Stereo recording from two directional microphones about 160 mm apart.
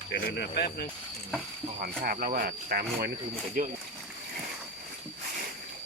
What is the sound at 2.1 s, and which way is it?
Speech, 65° right (ahead or behind).